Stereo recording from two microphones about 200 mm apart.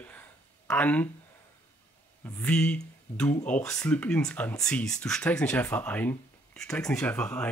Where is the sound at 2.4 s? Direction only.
5° left (ahead or behind).